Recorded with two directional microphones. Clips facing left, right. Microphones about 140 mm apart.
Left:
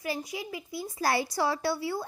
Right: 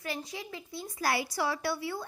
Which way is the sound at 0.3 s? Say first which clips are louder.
Left 4 dB; 15° left (ahead or behind).